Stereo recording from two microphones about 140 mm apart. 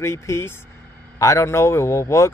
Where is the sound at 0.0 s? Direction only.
20° left (ahead or behind).